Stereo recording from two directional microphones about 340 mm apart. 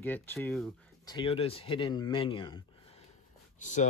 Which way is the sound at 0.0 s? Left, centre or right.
Centre.